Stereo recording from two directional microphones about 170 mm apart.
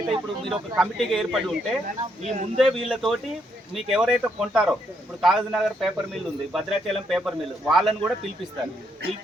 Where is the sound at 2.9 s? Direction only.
Centre (ahead or behind).